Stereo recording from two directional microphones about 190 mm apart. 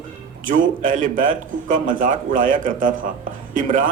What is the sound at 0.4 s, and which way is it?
A man's voice, 45° right (ahead or behind).